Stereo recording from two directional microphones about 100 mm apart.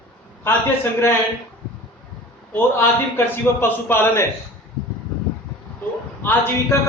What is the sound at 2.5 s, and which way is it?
A man's voice, 20° left (ahead or behind).